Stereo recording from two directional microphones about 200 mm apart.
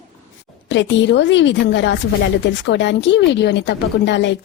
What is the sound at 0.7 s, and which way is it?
Speech, 60° left (ahead or behind).